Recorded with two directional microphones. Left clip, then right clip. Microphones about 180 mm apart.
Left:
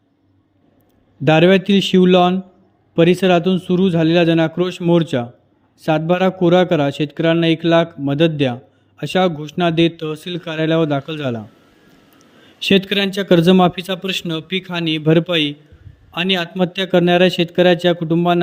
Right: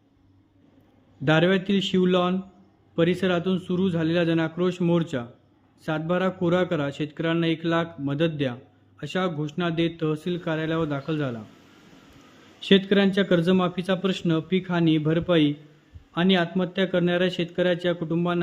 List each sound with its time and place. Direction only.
1.2 s a man's voice: 35° left (ahead or behind)
12.5 s a man's voice: 40° left (ahead or behind)